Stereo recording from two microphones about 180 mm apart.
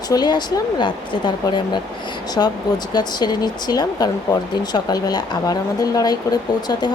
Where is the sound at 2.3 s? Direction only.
20° left (ahead or behind).